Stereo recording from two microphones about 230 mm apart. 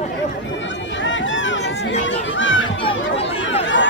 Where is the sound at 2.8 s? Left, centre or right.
Left.